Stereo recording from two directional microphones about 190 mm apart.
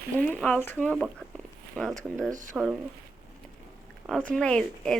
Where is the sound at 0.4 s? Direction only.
10° left (ahead or behind).